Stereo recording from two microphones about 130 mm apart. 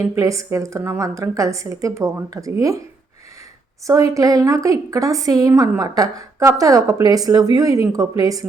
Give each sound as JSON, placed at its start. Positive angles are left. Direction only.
{"t": 0.0, "sound": "a woman's voice", "side_deg": -25}
{"t": 4.1, "sound": "a woman's voice", "side_deg": -25}